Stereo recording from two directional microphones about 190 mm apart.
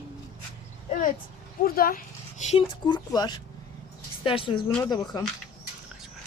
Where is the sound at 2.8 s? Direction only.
25° left (ahead or behind).